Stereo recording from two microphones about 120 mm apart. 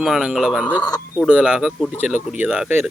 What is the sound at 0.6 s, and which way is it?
Speech, 10° left (ahead or behind).